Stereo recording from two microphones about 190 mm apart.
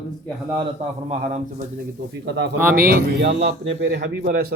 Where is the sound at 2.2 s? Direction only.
65° right (ahead or behind).